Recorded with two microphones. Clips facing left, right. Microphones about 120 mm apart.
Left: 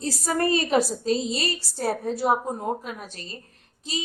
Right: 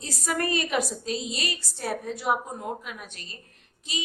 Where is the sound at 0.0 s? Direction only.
30° left (ahead or behind).